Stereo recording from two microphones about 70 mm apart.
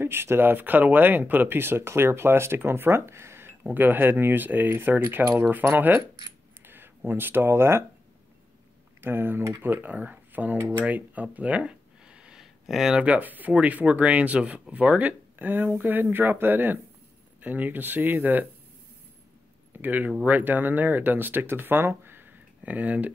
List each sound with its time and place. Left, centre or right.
0.0 s speech: right
6.6 s a sound: right
7.1 s speech: right
9.0 s speech: right
10.9 s a sound: right; by 12.9 s centre
12.9 s speech: centre
19.7 s speech: right